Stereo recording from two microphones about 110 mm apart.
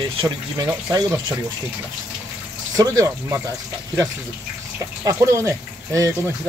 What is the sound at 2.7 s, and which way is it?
Speech, 30° right (ahead or behind).